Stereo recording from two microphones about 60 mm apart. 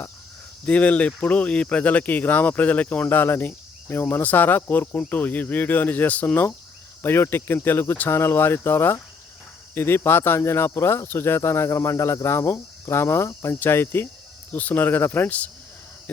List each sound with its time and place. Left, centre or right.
0.6 s speech: left
14.5 s speech: left